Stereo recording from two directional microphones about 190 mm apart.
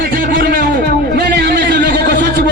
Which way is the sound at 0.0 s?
50° right (ahead or behind).